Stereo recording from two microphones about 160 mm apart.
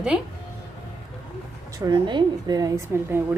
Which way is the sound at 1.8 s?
30° right (ahead or behind).